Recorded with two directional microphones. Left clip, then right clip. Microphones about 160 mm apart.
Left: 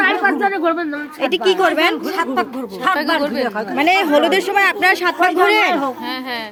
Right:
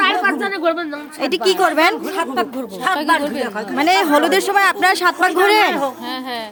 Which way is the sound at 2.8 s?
10° right (ahead or behind).